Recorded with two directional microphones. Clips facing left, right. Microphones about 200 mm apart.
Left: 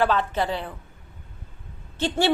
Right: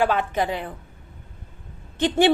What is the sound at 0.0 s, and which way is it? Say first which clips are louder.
Speech: right 1 dB; 15° right (ahead or behind).